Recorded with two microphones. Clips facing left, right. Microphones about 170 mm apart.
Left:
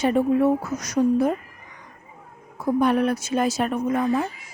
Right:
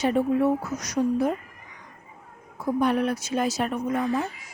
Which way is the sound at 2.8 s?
55° left (ahead or behind).